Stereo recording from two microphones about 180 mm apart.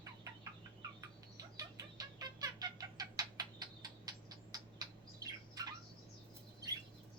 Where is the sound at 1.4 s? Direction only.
20° right (ahead or behind).